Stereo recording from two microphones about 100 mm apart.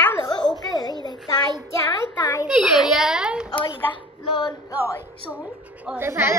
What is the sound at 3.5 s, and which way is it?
A woman's voice, 55° left (ahead or behind).